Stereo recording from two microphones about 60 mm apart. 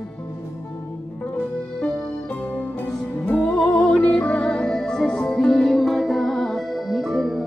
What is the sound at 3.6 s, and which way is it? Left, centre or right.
Music, centre.